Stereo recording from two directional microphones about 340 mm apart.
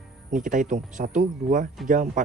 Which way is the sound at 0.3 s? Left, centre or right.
Right.